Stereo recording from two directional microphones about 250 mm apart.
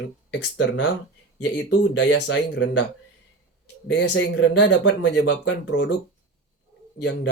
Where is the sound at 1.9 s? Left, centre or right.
Left.